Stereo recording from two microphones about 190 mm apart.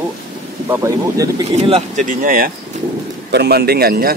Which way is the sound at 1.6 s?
35° right (ahead or behind).